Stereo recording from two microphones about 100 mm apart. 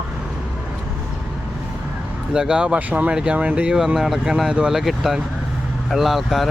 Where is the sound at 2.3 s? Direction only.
10° right (ahead or behind).